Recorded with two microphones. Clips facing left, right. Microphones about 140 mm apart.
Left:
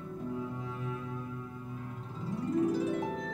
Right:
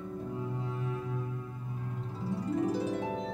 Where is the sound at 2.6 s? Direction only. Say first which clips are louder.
Left 1 dB; 35° right (ahead or behind).